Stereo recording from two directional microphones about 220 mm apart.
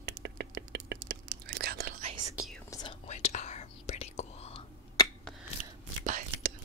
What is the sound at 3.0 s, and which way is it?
Whispering, 30° left (ahead or behind).